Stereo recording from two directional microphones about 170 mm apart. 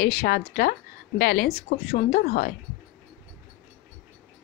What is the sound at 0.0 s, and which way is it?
A woman's voice, 60° left (ahead or behind).